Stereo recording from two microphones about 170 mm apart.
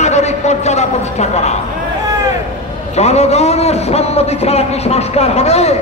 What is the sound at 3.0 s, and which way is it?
A man's voice, 40° left (ahead or behind).